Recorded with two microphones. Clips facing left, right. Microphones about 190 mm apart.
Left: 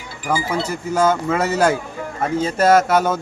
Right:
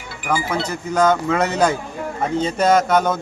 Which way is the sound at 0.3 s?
10° left (ahead or behind).